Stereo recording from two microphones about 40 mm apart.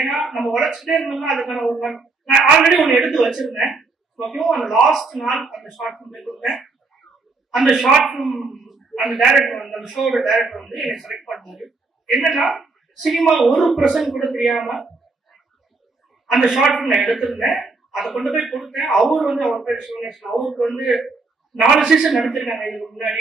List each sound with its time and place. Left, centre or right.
0.0 s a man's voice: centre
16.3 s a man's voice: centre
16.7 s a man's voice: centre